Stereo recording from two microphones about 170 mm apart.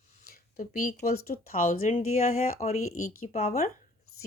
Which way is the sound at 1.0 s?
60° left (ahead or behind).